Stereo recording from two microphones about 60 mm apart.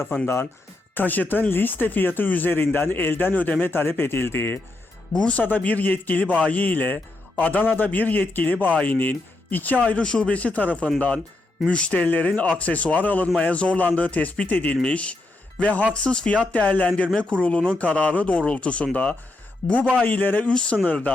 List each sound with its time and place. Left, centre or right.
0.9 s speech: left
5.4 s a man's voice: left
9.8 s a man's voice: centre
20.0 s a man's voice: left
20.5 s a man's voice: centre